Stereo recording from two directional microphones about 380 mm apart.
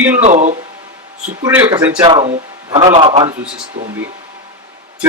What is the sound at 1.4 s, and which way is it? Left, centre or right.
A man's voice, centre.